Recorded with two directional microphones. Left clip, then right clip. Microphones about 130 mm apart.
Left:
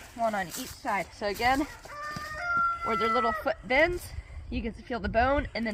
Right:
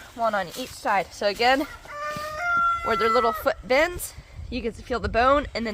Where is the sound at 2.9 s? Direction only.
50° right (ahead or behind).